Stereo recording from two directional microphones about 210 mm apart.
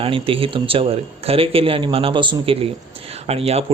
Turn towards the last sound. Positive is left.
turn(degrees=-30)  # may be behind; listen again after turning